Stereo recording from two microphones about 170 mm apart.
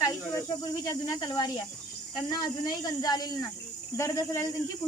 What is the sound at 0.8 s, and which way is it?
Speech, 20° left (ahead or behind).